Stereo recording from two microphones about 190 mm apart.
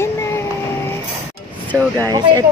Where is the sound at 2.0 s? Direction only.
20° right (ahead or behind).